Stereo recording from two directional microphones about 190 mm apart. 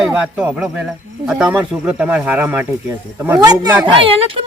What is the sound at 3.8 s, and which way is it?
Speech, 30° right (ahead or behind).